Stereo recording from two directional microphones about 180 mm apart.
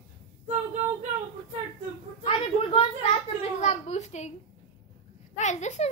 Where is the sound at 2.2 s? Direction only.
35° left (ahead or behind).